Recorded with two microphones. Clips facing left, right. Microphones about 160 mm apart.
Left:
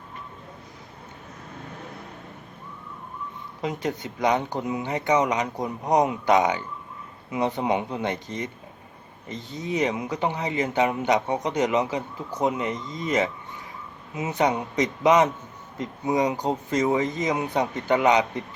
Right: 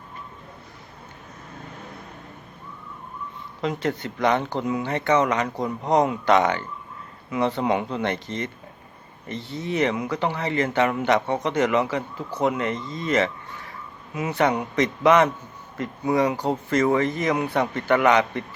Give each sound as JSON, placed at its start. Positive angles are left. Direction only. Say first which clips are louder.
{"t": 3.6, "sound": "speech", "louder": "right 3 dB", "side_deg": 15}